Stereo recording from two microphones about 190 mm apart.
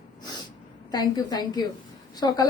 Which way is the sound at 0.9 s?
20° left (ahead or behind).